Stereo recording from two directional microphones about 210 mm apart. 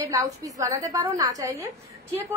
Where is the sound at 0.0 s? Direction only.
15° right (ahead or behind).